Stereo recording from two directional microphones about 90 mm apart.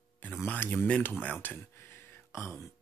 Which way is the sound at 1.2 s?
20° left (ahead or behind).